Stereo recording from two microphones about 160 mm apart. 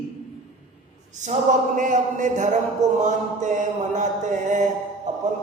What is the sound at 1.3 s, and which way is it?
Music, 50° right (ahead or behind).